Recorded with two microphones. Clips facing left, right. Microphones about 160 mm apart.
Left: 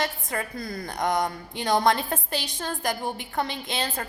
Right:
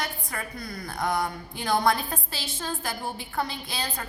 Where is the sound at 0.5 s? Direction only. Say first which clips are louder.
Left 4 dB; 50° left (ahead or behind).